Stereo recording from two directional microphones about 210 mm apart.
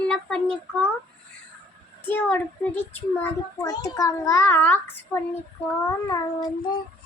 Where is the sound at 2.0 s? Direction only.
10° left (ahead or behind).